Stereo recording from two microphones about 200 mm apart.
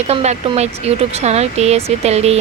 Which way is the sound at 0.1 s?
35° right (ahead or behind).